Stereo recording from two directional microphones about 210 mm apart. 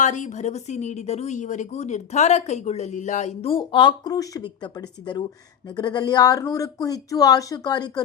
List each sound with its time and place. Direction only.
0.0 s a woman's voice: 35° left (ahead or behind); by 8.0 s 20° left (ahead or behind)